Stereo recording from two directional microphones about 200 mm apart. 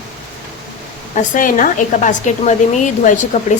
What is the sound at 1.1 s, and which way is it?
Speech, 40° left (ahead or behind).